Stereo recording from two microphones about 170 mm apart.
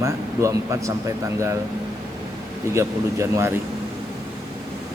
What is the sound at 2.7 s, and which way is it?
Speech, 15° right (ahead or behind).